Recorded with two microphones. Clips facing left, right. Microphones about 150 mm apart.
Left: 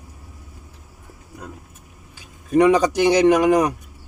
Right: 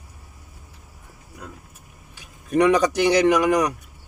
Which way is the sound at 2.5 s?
15° left (ahead or behind).